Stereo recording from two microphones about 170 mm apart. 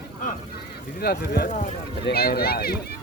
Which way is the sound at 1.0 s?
70° left (ahead or behind).